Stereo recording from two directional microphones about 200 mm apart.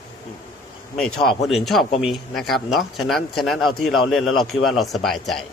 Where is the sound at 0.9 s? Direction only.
Centre (ahead or behind).